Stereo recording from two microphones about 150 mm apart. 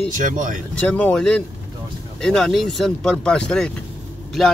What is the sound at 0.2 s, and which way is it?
Speech, 60° right (ahead or behind).